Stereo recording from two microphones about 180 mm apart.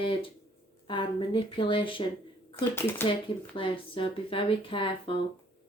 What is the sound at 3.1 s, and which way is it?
Speech, 30° left (ahead or behind).